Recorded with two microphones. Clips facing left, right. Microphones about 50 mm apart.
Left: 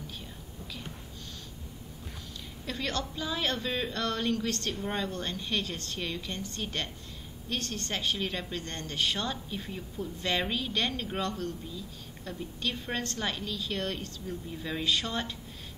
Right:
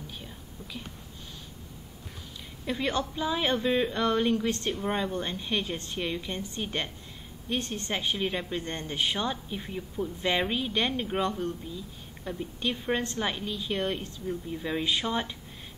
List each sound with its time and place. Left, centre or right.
2.6 s a woman's voice: centre